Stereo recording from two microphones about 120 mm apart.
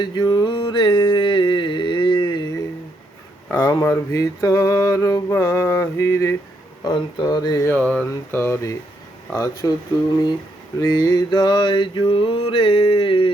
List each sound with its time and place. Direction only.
0.0 s mantra: 40° left (ahead or behind)
3.5 s mantra: 25° left (ahead or behind)
6.8 s speech: 40° left (ahead or behind)
7.7 s speech: 10° left (ahead or behind)
9.4 s speech: 35° left (ahead or behind)
10.8 s mantra: 30° left (ahead or behind)